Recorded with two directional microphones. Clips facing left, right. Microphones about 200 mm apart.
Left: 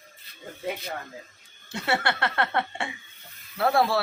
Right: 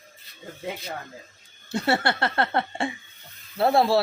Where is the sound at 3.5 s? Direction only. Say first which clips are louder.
Right 3 dB; 25° right (ahead or behind).